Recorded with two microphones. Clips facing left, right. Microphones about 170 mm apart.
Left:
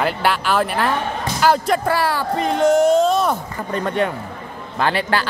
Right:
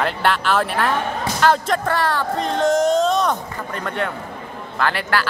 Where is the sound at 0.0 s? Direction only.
5° left (ahead or behind).